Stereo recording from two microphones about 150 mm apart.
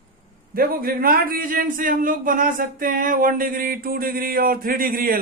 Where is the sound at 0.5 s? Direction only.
80° right.